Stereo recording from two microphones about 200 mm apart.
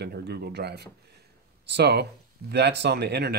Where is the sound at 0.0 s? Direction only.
55° right (ahead or behind).